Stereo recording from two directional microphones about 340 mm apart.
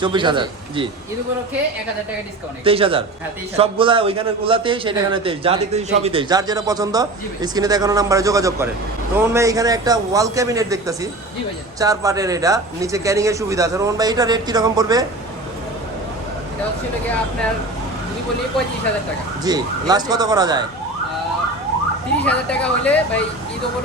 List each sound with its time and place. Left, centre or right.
0.0 s a man's voice: centre
2.6 s a man's voice: centre
19.5 s a man's voice: centre
22.2 s speech: centre